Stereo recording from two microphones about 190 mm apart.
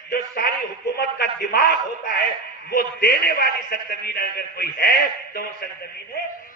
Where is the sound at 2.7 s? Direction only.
55° left (ahead or behind).